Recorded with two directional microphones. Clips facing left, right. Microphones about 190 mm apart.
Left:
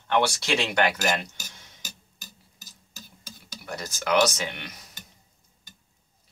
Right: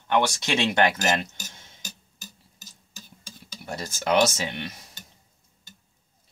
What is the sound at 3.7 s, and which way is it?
Speech, 25° right (ahead or behind).